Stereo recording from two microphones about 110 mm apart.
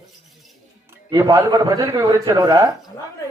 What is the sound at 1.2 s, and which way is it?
A man's voice, 30° right (ahead or behind).